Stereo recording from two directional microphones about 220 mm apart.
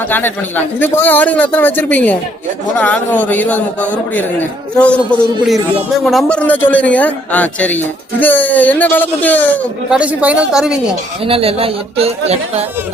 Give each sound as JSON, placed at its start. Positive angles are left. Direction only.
{"t": 0.1, "sound": "a man's voice", "side_deg": 10}
{"t": 9.9, "sound": "speech", "side_deg": -5}
{"t": 11.3, "sound": "speech", "side_deg": -25}